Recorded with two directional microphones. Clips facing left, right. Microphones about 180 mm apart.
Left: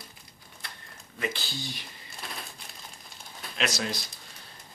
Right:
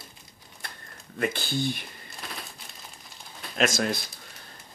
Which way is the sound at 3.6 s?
50° right (ahead or behind).